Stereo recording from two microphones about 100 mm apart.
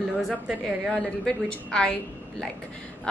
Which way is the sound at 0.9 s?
10° left (ahead or behind).